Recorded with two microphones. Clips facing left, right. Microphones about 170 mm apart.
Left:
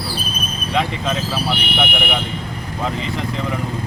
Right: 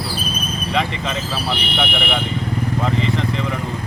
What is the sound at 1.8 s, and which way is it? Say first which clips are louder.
Speech: right 1 dB; centre (ahead or behind).